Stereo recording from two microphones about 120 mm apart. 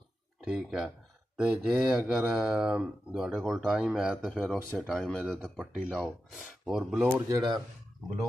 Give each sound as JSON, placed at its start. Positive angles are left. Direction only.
{"t": 0.5, "sound": "speech", "side_deg": -5}
{"t": 7.2, "sound": "speech", "side_deg": -30}